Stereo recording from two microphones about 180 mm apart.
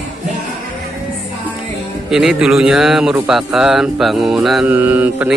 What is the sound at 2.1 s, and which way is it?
Speech, centre (ahead or behind).